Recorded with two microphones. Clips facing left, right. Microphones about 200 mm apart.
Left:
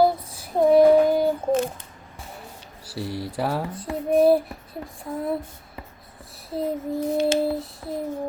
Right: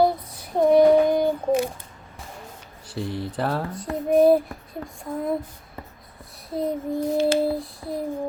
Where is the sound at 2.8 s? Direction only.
10° left (ahead or behind).